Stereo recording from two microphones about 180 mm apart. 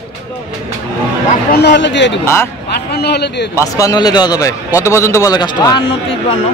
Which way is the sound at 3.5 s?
20° left (ahead or behind).